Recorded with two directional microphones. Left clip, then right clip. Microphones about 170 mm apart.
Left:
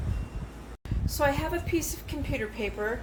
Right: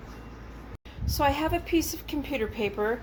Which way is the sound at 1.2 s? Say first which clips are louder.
Right 2 dB; 40° right (ahead or behind).